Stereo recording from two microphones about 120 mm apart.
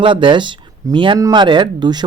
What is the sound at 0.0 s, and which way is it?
A man's voice, 45° right (ahead or behind).